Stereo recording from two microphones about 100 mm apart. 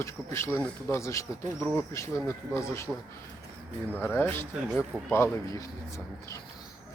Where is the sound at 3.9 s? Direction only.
15° left (ahead or behind); by 6.4 s 30° left (ahead or behind).